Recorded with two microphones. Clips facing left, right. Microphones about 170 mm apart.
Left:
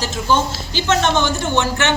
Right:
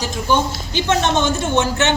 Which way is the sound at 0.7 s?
15° right (ahead or behind).